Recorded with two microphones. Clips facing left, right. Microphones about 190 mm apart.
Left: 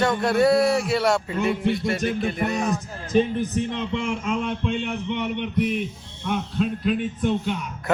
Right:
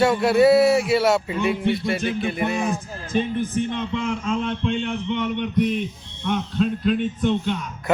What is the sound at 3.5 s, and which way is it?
Speech, 35° left (ahead or behind).